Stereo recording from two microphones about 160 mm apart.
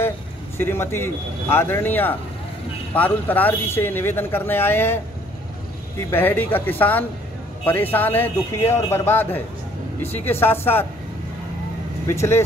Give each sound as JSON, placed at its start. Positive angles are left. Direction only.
{"t": 0.6, "sound": "speech", "side_deg": 15}
{"t": 6.0, "sound": "speech", "side_deg": 10}
{"t": 12.1, "sound": "speech", "side_deg": 15}